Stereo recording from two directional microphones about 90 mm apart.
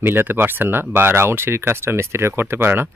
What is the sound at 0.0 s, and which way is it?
Speech, 25° right (ahead or behind).